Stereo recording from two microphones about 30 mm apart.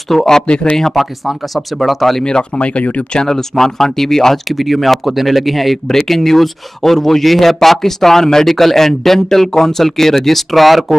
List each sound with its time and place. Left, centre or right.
0.1 s speech: centre
0.9 s speech: centre
2.2 s speech: left
2.6 s speech: left
3.3 s speech: centre
4.5 s speech: centre
5.9 s speech: centre